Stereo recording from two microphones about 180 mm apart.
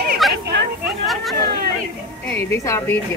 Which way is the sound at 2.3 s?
15° left (ahead or behind).